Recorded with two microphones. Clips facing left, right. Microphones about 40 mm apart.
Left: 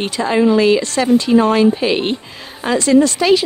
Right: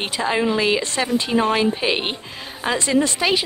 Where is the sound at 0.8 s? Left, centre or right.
Right.